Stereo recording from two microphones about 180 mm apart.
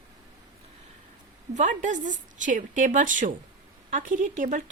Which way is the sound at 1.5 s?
45° right (ahead or behind).